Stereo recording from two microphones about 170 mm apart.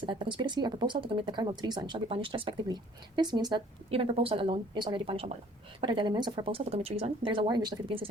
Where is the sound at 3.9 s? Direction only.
35° right (ahead or behind).